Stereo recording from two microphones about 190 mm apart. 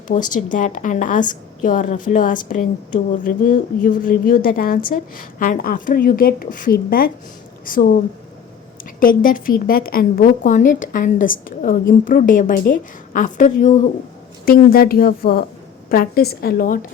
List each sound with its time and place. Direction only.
0.1 s a woman's voice: 40° left (ahead or behind)
9.0 s a woman's voice: 45° left (ahead or behind)